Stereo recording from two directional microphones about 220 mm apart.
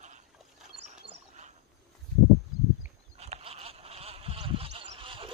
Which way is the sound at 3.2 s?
30° right (ahead or behind).